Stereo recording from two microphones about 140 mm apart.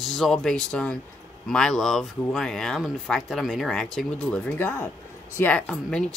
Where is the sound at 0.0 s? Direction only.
Centre (ahead or behind).